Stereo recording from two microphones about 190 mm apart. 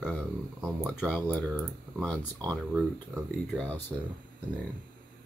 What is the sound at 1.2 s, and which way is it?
Speech, 15° right (ahead or behind).